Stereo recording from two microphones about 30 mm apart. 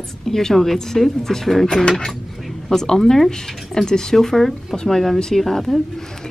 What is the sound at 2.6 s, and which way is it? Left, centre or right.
Speech, centre.